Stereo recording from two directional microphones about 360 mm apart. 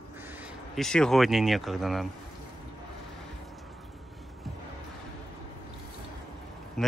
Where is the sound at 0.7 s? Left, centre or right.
Centre.